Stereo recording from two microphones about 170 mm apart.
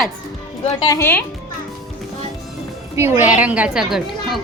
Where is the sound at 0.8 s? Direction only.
20° left (ahead or behind).